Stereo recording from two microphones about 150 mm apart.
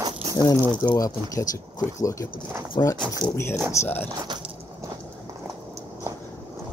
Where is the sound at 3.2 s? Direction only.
20° left (ahead or behind).